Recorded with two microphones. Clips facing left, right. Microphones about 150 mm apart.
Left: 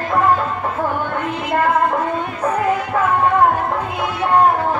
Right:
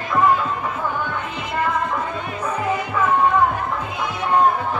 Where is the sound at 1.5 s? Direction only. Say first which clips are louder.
Left 6 dB; 60° left (ahead or behind).